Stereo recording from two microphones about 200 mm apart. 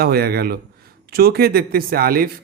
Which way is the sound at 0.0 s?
50° right (ahead or behind).